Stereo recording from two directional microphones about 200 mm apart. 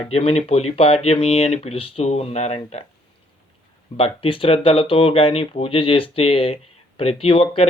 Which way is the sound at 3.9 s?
30° left (ahead or behind).